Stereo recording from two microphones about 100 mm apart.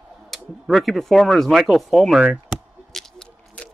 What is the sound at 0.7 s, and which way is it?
Speech, centre (ahead or behind).